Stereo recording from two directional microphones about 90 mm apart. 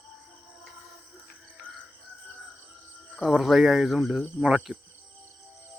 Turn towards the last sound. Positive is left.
turn(degrees=-15)  # may be behind; listen again after turning